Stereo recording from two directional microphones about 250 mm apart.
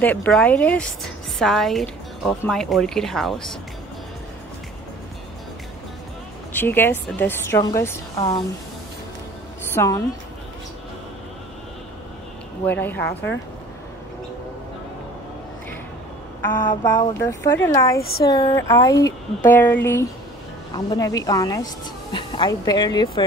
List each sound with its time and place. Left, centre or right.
0.0 s a woman's voice: centre
6.5 s speech: centre
9.8 s speech: centre
12.6 s speech: centre
16.5 s speech: centre